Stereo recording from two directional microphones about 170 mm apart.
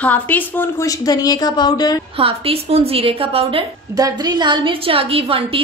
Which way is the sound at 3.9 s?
25° right (ahead or behind).